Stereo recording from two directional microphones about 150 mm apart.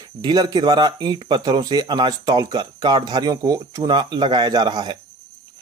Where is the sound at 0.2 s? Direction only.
30° right (ahead or behind).